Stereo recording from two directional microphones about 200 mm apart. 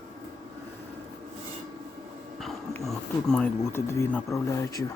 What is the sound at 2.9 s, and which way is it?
Speech, 5° left (ahead or behind).